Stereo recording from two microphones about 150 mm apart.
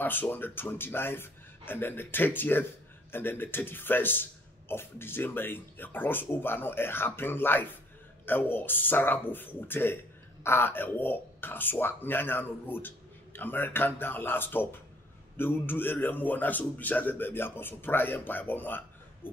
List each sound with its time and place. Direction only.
0.0 s a man's voice: 15° left (ahead or behind)